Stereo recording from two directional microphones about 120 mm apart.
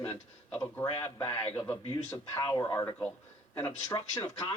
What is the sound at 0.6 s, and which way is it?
Speech, 20° left (ahead or behind).